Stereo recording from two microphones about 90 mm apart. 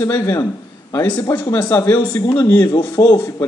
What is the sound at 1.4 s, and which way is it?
Speech, 20° left (ahead or behind).